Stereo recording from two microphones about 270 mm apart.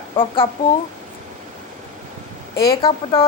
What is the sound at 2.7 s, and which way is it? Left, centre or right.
Speech, centre.